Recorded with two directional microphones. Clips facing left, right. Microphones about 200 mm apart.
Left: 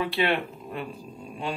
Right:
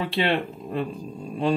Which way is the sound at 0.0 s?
30° right (ahead or behind).